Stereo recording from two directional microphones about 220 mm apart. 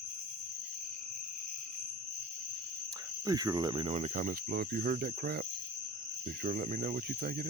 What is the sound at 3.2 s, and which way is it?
Cricket, 15° right (ahead or behind).